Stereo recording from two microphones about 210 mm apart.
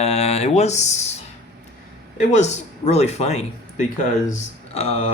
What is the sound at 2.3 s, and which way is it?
Speech, 30° left (ahead or behind).